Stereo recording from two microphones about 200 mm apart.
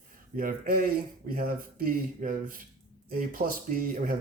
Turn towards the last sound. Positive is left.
turn(degrees=-45)  # may be behind; listen again after turning